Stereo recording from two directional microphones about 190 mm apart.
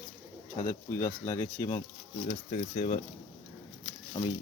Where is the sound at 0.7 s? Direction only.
15° left (ahead or behind).